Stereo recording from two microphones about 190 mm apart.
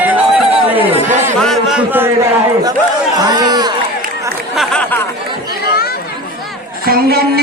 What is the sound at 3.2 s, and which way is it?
Speech, 20° right (ahead or behind).